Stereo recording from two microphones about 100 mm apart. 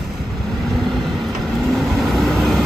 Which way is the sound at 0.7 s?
5° left (ahead or behind).